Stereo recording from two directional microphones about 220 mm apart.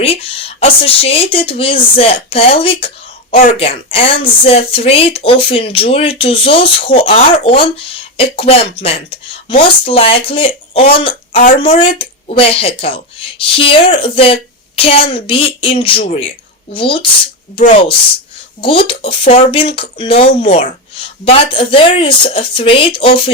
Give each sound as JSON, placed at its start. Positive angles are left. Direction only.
{"t": 0.0, "sound": "speech", "side_deg": 25}
{"t": 3.3, "sound": "speech", "side_deg": 35}
{"t": 3.9, "sound": "speech", "side_deg": 25}
{"t": 11.3, "sound": "speech", "side_deg": 35}
{"t": 11.8, "sound": "speech", "side_deg": 25}
{"t": 18.6, "sound": "speech", "side_deg": 25}